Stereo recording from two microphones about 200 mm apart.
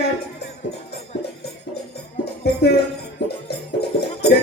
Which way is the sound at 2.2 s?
55° left (ahead or behind).